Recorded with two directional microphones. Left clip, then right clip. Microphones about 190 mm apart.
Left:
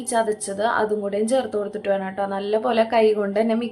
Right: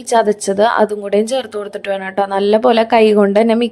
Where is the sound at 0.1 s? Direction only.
40° right (ahead or behind).